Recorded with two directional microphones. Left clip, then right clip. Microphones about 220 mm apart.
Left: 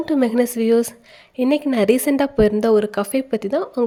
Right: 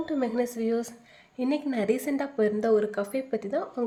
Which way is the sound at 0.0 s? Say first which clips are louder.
Left 10 dB; 40° left (ahead or behind).